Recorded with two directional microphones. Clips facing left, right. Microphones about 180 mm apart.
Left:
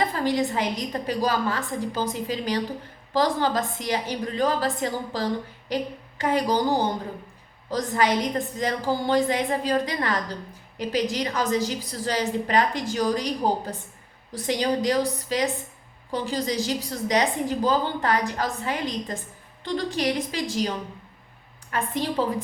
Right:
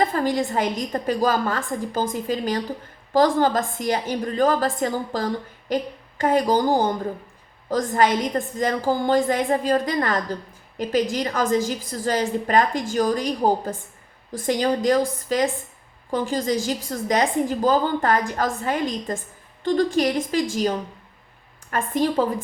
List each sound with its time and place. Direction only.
0.1 s a woman's voice: 45° right (ahead or behind)